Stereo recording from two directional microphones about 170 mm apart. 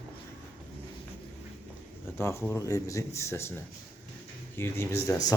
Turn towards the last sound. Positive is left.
turn(degrees=20)  # may be behind; listen again after turning